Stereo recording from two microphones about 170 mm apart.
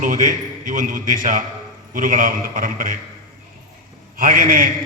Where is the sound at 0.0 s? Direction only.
50° right (ahead or behind).